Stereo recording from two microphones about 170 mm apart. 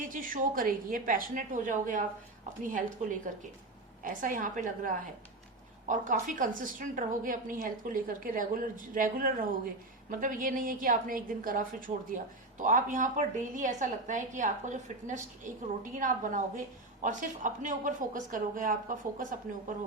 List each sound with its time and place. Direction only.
0.0 s a woman's voice: 55° right (ahead or behind)